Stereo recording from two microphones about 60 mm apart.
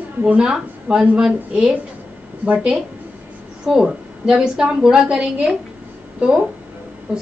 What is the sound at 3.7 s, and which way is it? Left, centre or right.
A woman's voice, centre.